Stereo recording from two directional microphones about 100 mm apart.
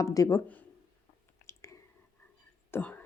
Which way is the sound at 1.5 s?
30° left (ahead or behind).